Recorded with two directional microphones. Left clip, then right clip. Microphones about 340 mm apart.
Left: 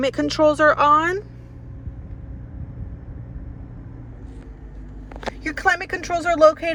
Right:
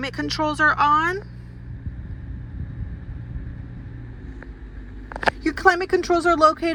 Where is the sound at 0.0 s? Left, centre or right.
Centre.